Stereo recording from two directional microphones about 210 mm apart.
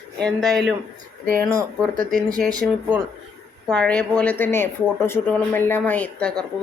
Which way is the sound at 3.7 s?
5° left (ahead or behind).